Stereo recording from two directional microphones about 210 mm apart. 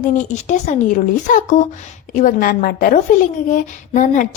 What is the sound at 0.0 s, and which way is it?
A woman's voice, 35° left (ahead or behind).